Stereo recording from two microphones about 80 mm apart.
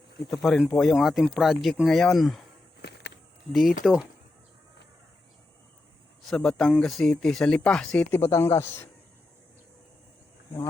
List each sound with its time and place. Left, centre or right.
0.3 s speech: centre
3.5 s speech: centre
6.2 s speech: centre
8.2 s speech: left